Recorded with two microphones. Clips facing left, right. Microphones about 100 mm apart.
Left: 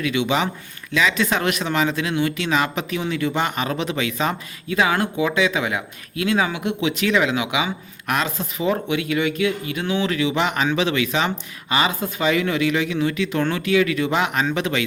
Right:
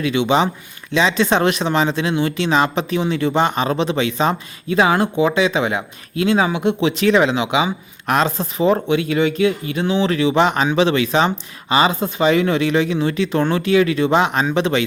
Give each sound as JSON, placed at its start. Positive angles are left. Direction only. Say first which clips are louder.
{"t": 0.0, "sound": "speech", "louder": "right 5 dB", "side_deg": -30}